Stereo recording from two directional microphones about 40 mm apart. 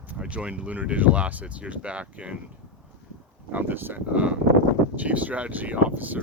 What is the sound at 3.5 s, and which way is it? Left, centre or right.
Speech, right.